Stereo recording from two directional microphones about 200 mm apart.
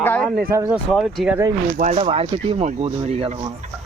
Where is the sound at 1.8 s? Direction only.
35° right (ahead or behind).